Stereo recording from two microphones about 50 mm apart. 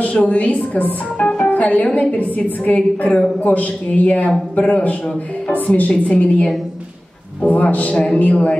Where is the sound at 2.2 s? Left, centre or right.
Left.